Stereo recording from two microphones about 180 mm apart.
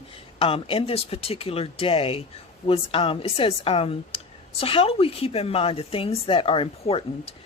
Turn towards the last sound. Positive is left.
turn(degrees=35)  # may be behind; listen again after turning